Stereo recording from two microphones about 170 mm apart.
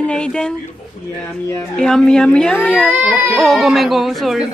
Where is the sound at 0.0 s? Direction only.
5° left (ahead or behind).